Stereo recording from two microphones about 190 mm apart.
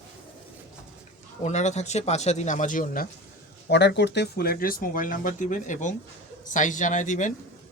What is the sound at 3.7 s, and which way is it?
A man's voice, 65° left (ahead or behind).